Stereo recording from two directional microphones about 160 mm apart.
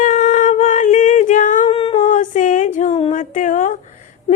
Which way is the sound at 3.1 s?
55° left (ahead or behind).